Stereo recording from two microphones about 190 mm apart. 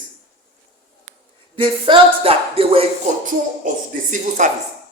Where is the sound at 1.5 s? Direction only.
25° right (ahead or behind).